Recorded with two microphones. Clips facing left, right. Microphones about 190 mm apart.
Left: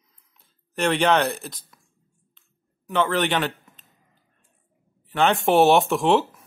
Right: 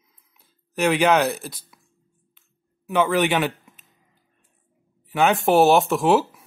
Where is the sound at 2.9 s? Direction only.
10° right (ahead or behind).